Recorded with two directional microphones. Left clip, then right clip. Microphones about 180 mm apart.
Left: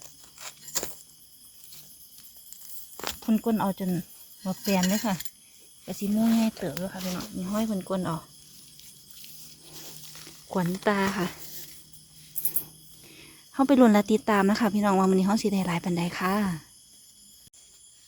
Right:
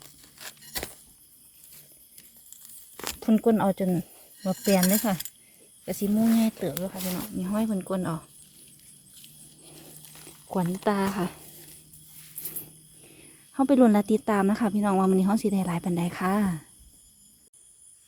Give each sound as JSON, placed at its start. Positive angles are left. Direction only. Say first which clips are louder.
{"t": 0.0, "sound": "a sound", "louder": "even", "side_deg": -10}
{"t": 3.2, "sound": "speech", "louder": "right 5 dB", "side_deg": -40}
{"t": 4.8, "sound": "speech", "louder": "right 2 dB", "side_deg": -25}
{"t": 5.8, "sound": "speech", "louder": "right 3 dB", "side_deg": -40}
{"t": 6.1, "sound": "speech", "louder": "even", "side_deg": -25}
{"t": 6.9, "sound": "speech", "louder": "even", "side_deg": -45}
{"t": 7.3, "sound": "speech", "louder": "right 1 dB", "side_deg": -20}
{"t": 10.8, "sound": "a woman's voice", "louder": "left 1 dB", "side_deg": -5}
{"t": 13.0, "sound": "a woman's voice", "louder": "left 4 dB", "side_deg": 0}